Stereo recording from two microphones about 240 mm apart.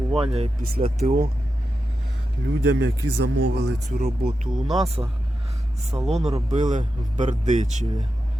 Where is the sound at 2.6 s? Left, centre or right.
Right.